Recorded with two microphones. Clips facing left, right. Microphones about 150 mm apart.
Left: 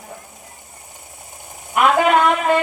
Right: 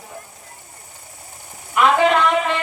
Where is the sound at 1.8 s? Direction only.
50° left (ahead or behind).